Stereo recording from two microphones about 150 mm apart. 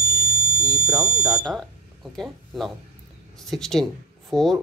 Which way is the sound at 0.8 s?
5° right (ahead or behind).